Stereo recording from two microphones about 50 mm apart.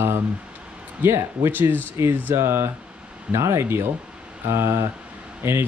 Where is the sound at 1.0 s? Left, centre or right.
Right.